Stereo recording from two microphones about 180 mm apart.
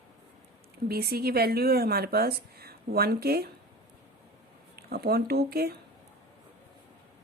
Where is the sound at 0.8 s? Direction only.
60° right (ahead or behind).